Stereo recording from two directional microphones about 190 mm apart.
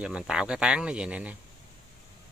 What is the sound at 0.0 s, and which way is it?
Speech, 5° right (ahead or behind).